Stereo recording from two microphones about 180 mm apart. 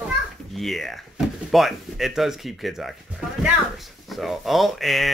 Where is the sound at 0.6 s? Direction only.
Centre (ahead or behind).